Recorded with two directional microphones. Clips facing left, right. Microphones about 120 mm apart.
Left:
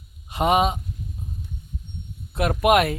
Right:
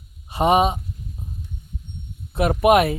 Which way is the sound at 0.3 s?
30° right (ahead or behind).